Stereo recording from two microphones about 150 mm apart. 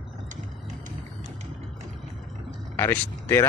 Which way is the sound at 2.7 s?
15° left (ahead or behind).